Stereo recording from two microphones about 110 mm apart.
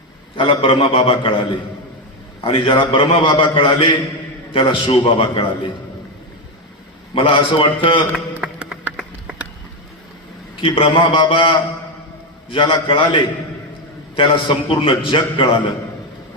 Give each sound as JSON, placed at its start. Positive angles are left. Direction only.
{"t": 0.3, "sound": "a man's voice", "side_deg": 50}
{"t": 2.4, "sound": "a man's voice", "side_deg": 45}
{"t": 7.1, "sound": "a man's voice", "side_deg": 50}
{"t": 8.4, "sound": "a sound", "side_deg": -10}
{"t": 10.6, "sound": "a man's voice", "side_deg": 50}